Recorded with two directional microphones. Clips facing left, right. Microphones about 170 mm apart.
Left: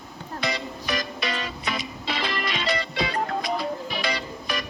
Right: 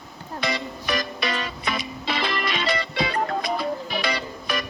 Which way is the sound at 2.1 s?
65° right (ahead or behind).